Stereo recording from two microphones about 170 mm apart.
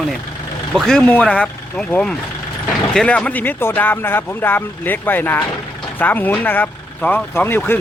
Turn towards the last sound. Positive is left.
turn(degrees=10)  # may be behind; listen again after turning